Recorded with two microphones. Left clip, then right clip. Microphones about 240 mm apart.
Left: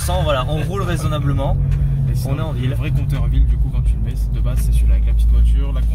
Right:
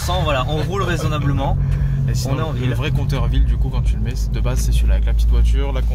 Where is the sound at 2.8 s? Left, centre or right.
Right.